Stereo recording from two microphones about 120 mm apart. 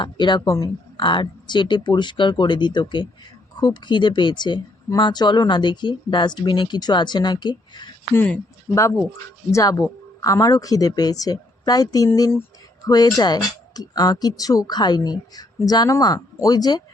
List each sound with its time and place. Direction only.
0.0 s speech: 40° left (ahead or behind)
0.4 s speech: 25° left (ahead or behind)
0.9 s speech: 40° left (ahead or behind)
8.7 s speech: 25° left (ahead or behind)